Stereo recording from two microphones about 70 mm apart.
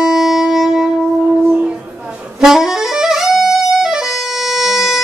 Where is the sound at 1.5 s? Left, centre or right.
Right.